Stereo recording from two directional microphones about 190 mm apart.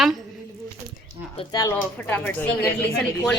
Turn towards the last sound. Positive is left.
turn(degrees=5)  # may be behind; listen again after turning